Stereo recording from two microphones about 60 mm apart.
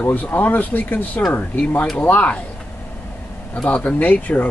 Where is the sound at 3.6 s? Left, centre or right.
Left.